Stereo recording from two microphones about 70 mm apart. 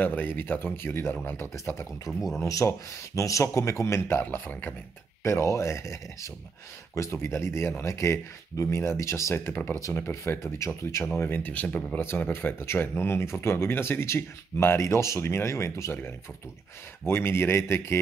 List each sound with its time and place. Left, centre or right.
0.0 s speech: left
2.0 s speech: centre
2.4 s speech: left
4.2 s speech: left
5.2 s speech: left
11.1 s speech: left
12.0 s speech: left
17.0 s speech: left